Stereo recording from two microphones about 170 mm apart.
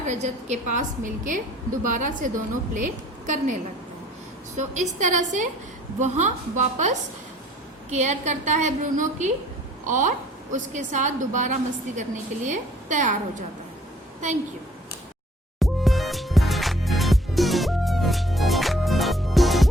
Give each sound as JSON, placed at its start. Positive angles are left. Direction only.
{"t": 0.0, "sound": "a woman's voice", "side_deg": -45}
{"t": 15.5, "sound": "music", "side_deg": 0}